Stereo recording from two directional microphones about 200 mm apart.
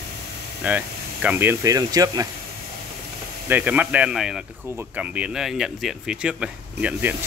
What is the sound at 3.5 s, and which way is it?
Speech, 10° right (ahead or behind).